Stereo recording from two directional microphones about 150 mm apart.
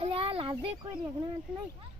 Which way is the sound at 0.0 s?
40° right (ahead or behind).